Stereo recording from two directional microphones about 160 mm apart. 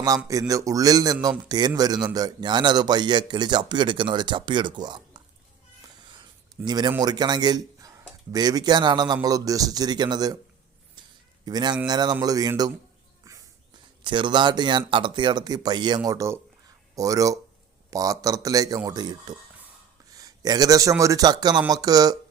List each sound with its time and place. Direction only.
0.3 s speech: 20° right (ahead or behind)
6.7 s speech: 25° right (ahead or behind)
11.4 s speech: 25° right (ahead or behind)
14.0 s speech: 30° right (ahead or behind)
20.1 s a sound: 25° right (ahead or behind)
21.0 s speech: 20° right (ahead or behind)